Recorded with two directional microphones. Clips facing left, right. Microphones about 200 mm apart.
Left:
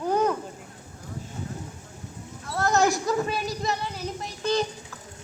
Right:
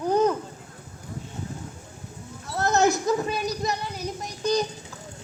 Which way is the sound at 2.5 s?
20° right (ahead or behind).